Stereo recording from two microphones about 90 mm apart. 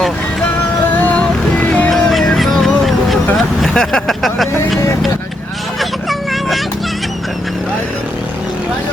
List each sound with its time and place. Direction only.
0.9 s boat: 20° left (ahead or behind)
1.9 s music: 5° left (ahead or behind)
2.3 s vehicle: centre (ahead or behind)
5.8 s vehicle: centre (ahead or behind)